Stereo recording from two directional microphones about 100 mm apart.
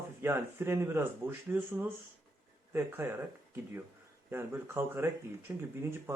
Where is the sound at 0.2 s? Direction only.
25° right (ahead or behind).